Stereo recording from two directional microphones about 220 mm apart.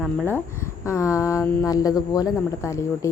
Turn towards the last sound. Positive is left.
turn(degrees=15)  # may be behind; listen again after turning